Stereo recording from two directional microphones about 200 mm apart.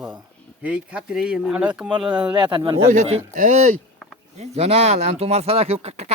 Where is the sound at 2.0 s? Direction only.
25° right (ahead or behind).